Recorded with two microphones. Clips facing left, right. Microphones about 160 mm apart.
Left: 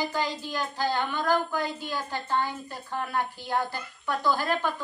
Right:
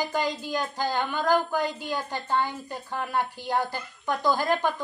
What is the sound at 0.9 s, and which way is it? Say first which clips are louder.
A woman's voice: right 3 dB; 15° right (ahead or behind).